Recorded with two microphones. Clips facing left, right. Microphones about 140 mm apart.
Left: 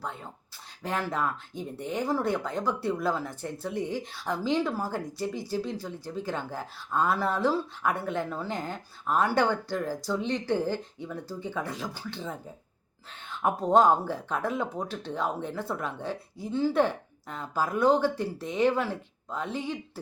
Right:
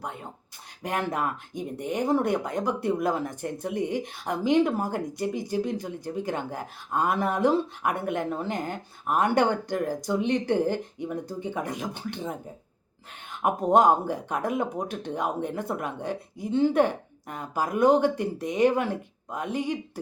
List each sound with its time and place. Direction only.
0.0 s speech: 15° right (ahead or behind)